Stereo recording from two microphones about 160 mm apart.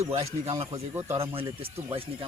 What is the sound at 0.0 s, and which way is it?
Speech, 40° right (ahead or behind).